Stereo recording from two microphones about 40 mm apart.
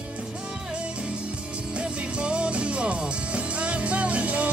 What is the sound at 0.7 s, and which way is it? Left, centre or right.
Music, right.